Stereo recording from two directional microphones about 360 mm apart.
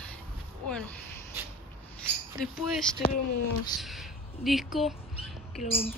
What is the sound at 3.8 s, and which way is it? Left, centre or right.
Speech, centre.